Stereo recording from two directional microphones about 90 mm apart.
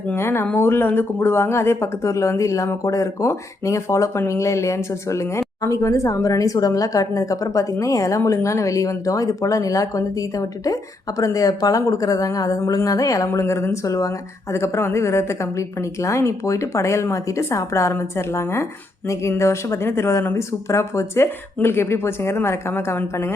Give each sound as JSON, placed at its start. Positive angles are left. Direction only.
{"t": 0.1, "sound": "a woman's voice", "side_deg": 25}